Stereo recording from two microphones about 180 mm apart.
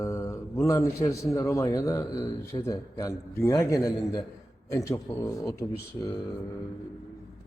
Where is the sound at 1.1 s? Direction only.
15° left (ahead or behind).